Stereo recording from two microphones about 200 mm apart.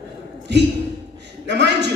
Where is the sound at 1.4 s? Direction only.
60° right (ahead or behind).